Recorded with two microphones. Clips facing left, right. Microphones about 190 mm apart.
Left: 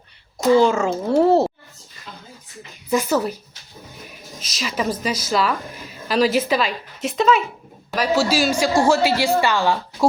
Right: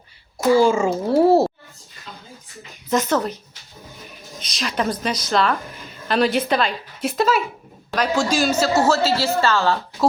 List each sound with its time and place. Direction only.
0.5 s a child's voice: 10° right (ahead or behind)
2.9 s a woman's voice: 10° left (ahead or behind)
4.4 s a woman's voice: 5° left (ahead or behind)